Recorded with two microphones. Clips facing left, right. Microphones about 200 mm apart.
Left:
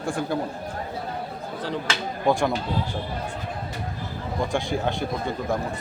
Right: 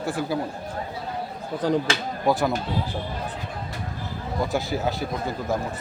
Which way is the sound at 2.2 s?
5° right (ahead or behind).